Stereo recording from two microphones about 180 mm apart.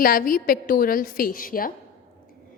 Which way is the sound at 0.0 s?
50° left (ahead or behind).